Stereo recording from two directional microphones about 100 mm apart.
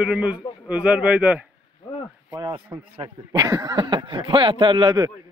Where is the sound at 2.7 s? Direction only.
35° right (ahead or behind).